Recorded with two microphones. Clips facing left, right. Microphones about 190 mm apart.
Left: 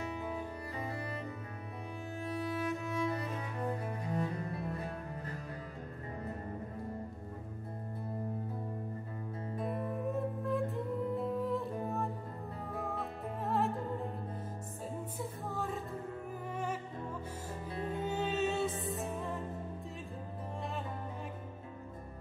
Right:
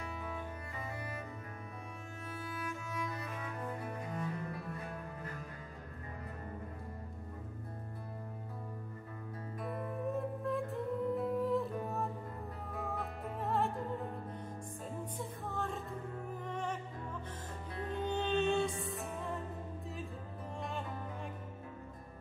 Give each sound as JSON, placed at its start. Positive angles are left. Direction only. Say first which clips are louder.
{"t": 0.2, "sound": "music", "louder": "left 4 dB", "side_deg": 35}
{"t": 2.2, "sound": "cello", "louder": "left 7 dB", "side_deg": 30}
{"t": 9.6, "sound": "music", "louder": "left 3 dB", "side_deg": 25}
{"t": 10.0, "sound": "music", "louder": "right 1 dB", "side_deg": 0}
{"t": 12.9, "sound": "music", "louder": "left 1 dB", "side_deg": 0}
{"t": 15.1, "sound": "music", "louder": "left 1 dB", "side_deg": 0}
{"t": 17.8, "sound": "music", "louder": "even", "side_deg": 5}